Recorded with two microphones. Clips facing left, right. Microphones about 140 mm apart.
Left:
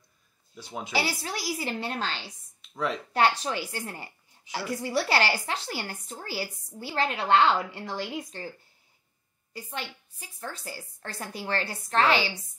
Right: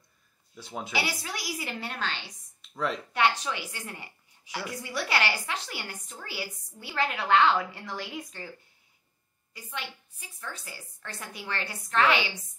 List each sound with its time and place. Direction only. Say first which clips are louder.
0.6 s speech: even; centre (ahead or behind)
0.9 s a woman's voice: left 3 dB; 30° left (ahead or behind)
2.6 s a sound: left 1 dB; centre (ahead or behind)
3.1 s a woman's voice: left 3 dB; 35° left (ahead or behind)
9.5 s a woman's voice: left 2 dB; 35° left (ahead or behind)